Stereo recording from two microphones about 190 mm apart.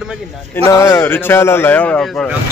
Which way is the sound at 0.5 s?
15° left (ahead or behind).